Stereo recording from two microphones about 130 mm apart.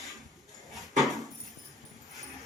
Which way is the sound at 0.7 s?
Centre (ahead or behind).